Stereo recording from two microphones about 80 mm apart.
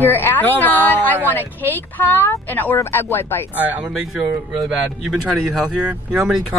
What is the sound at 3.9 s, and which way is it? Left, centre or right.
Speech, centre.